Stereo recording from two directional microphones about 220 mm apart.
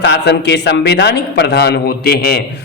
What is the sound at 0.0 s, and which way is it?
A man's voice, 50° left (ahead or behind).